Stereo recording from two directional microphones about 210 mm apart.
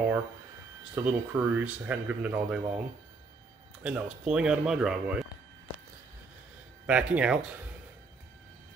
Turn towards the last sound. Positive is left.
turn(degrees=-5)  # may be behind; listen again after turning